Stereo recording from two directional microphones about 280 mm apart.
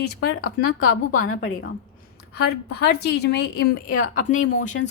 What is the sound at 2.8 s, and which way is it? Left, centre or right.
A woman's voice, left.